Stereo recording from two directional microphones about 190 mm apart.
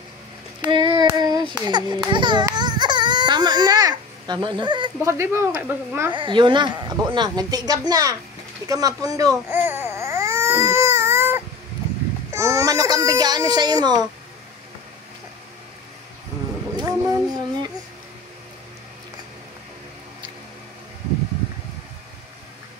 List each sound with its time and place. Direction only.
0.6 s child singing: 25° right (ahead or behind)
1.7 s speech: 20° right (ahead or behind)
6.1 s speech: 25° right (ahead or behind)
8.6 s baby cry: 20° right (ahead or behind)
12.3 s speech: 15° right (ahead or behind)
16.7 s a sound: 20° right (ahead or behind)